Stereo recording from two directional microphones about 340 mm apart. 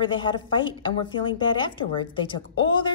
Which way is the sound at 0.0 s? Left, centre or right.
Centre.